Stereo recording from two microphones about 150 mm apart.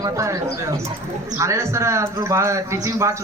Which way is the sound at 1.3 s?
20° right (ahead or behind).